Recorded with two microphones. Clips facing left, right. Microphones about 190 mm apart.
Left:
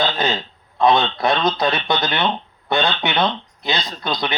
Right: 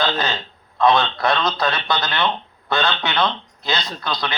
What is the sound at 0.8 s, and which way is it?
A man's voice, 20° left (ahead or behind).